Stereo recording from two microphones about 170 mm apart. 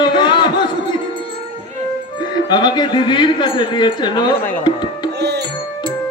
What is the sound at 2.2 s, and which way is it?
Speech, 25° left (ahead or behind).